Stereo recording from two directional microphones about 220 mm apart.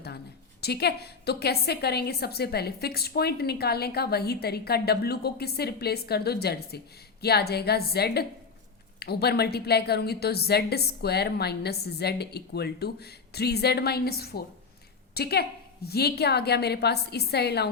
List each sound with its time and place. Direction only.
0.6 s a woman's voice: 45° left (ahead or behind)